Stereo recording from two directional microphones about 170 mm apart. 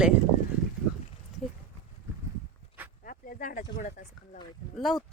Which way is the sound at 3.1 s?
55° left (ahead or behind).